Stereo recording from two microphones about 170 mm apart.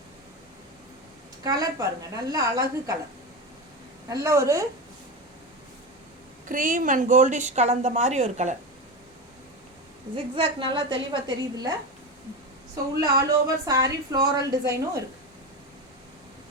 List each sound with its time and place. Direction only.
1.5 s speech: 20° right (ahead or behind)
4.1 s a woman's voice: 15° right (ahead or behind)
6.5 s a woman's voice: 50° right (ahead or behind)
10.3 s speech: 30° right (ahead or behind)
12.7 s speech: 20° right (ahead or behind)